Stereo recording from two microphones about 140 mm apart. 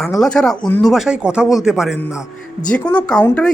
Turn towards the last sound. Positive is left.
turn(degrees=10)  # may be behind; listen again after turning